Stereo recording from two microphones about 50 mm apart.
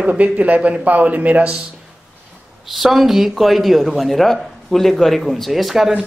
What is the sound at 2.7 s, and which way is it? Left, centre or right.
A man's voice, centre.